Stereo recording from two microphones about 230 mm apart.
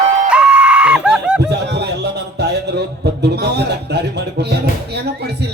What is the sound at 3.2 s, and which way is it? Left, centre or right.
A man's voice, right.